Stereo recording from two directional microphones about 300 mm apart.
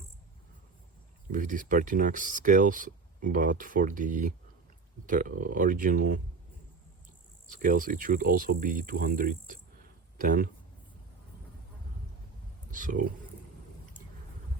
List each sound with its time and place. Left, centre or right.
1.3 s speech: right
7.5 s speech: right
12.7 s speech: right